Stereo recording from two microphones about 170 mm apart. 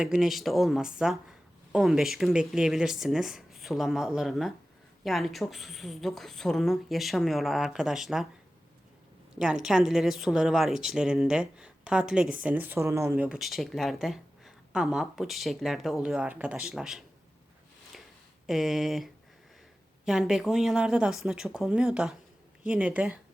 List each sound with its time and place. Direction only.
0.0 s speech: 5° right (ahead or behind)
9.6 s speech: centre (ahead or behind)
18.4 s speech: centre (ahead or behind)